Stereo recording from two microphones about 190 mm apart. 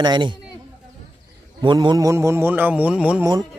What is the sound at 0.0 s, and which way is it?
Speech, 25° right (ahead or behind).